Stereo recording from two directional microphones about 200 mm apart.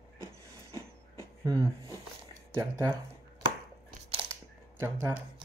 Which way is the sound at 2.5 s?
10° right (ahead or behind).